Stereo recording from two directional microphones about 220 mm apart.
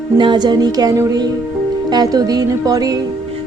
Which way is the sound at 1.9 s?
15° right (ahead or behind).